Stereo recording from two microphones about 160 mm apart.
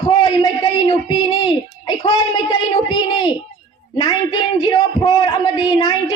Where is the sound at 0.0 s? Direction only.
25° left (ahead or behind).